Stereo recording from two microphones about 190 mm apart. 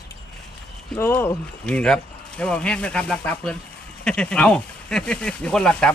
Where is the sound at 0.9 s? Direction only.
10° left (ahead or behind).